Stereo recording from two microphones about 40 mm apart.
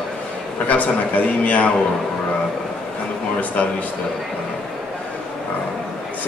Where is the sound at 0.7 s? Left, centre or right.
Left.